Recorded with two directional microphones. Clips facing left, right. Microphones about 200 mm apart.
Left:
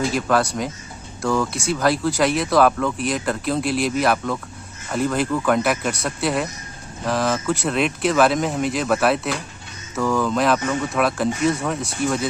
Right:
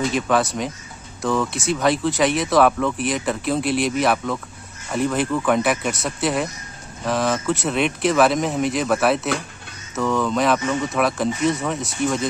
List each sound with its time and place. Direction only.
0.1 s speech: centre (ahead or behind)